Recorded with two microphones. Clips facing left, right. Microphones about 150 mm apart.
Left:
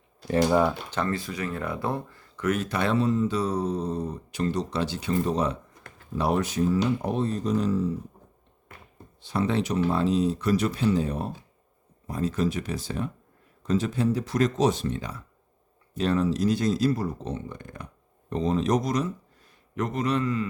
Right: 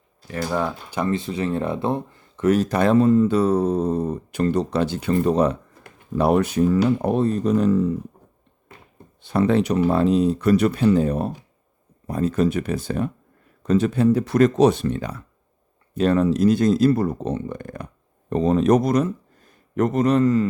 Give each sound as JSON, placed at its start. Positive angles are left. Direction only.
{"t": 0.5, "sound": "speech", "side_deg": 5}
{"t": 0.9, "sound": "speech", "side_deg": -15}
{"t": 9.2, "sound": "speech", "side_deg": -55}